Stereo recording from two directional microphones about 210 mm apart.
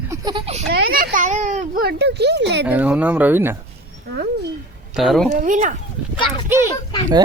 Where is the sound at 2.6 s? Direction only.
5° right (ahead or behind).